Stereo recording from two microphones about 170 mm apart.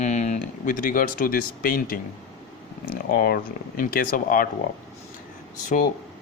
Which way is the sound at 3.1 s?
60° left (ahead or behind).